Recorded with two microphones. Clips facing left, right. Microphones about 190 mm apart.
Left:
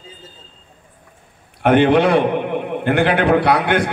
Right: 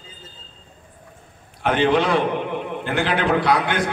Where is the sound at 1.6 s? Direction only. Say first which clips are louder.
Left 6 dB; 60° left (ahead or behind).